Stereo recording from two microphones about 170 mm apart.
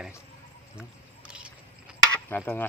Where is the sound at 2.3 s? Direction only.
10° left (ahead or behind).